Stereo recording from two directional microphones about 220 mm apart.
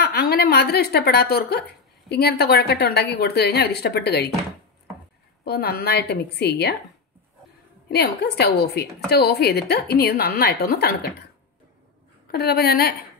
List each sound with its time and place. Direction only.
0.0 s a woman's voice: 45° left (ahead or behind)
5.4 s a woman's voice: 45° left (ahead or behind)
7.9 s a woman's voice: 50° left (ahead or behind)
12.3 s a woman's voice: 45° left (ahead or behind)